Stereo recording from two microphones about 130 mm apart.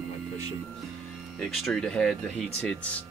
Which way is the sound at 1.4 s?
Centre (ahead or behind).